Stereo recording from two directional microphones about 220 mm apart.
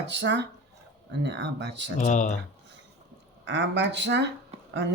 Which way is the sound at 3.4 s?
55° right (ahead or behind).